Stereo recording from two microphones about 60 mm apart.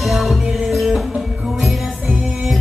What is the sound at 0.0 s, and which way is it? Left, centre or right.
Music, centre.